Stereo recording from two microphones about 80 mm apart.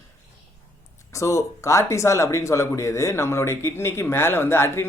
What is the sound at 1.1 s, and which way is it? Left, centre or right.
Speech, left.